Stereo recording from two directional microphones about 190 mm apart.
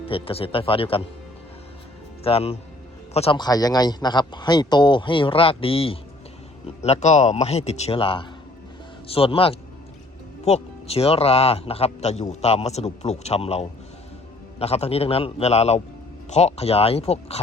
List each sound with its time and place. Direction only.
0.0 s a man's voice: 30° left (ahead or behind)
2.2 s a man's voice: 30° left (ahead or behind)